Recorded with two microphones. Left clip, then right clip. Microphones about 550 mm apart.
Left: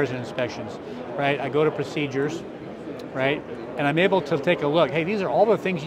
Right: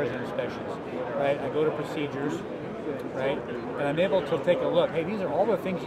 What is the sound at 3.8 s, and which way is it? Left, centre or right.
Speech, left.